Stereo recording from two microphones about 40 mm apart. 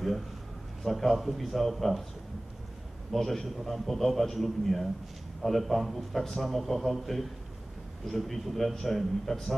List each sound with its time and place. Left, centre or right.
0.8 s a man's voice: centre
3.1 s a man's voice: centre